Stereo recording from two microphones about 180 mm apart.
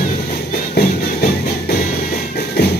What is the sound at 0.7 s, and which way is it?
Music, 60° left (ahead or behind).